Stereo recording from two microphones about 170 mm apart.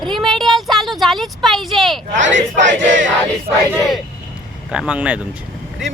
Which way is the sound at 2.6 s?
90° right.